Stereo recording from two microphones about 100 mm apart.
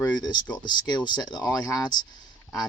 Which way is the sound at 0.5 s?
50° left (ahead or behind).